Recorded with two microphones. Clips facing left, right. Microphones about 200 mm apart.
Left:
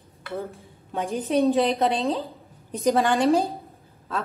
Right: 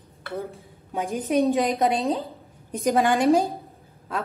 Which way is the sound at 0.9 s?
15° right (ahead or behind).